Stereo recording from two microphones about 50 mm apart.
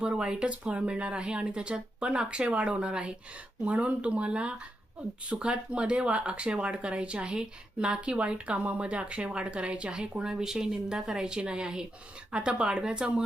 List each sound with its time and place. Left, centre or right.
0.0 s speech: centre